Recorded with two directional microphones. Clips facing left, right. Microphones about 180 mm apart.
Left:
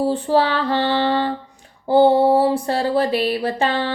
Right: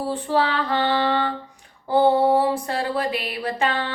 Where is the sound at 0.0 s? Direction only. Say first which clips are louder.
Left 5 dB; 30° left (ahead or behind).